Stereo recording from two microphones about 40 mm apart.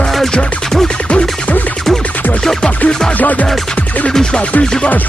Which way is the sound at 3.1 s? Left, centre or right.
Left.